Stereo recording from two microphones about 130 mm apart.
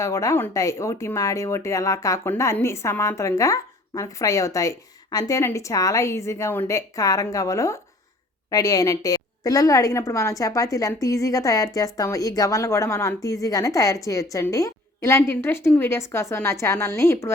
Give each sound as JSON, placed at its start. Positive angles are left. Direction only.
{"t": 0.0, "sound": "speech", "side_deg": 25}